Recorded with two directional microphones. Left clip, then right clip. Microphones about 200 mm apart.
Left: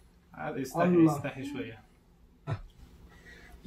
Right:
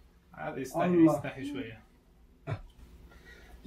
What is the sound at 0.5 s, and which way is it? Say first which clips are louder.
Speech: left 1 dB; 40° left (ahead or behind).